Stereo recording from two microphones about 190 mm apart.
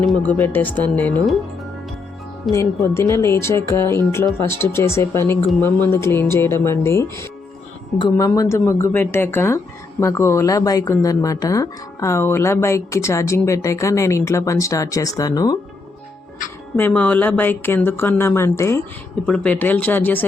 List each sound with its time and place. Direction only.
0.3 s speech: 10° left (ahead or behind)
2.5 s speech: 15° left (ahead or behind)
16.7 s speech: 10° left (ahead or behind)